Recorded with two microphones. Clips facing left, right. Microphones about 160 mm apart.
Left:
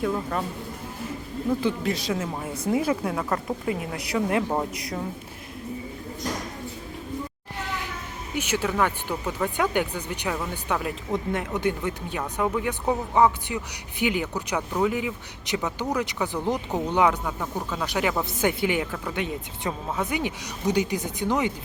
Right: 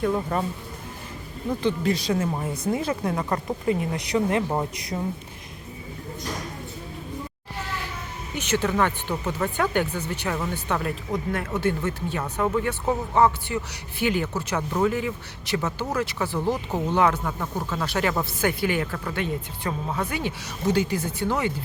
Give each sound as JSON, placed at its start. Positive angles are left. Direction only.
{"t": 0.1, "sound": "speech", "side_deg": -10}
{"t": 1.6, "sound": "speech", "side_deg": 0}
{"t": 3.2, "sound": "speech", "side_deg": -10}
{"t": 3.7, "sound": "speech", "side_deg": 5}
{"t": 8.4, "sound": "speech", "side_deg": 10}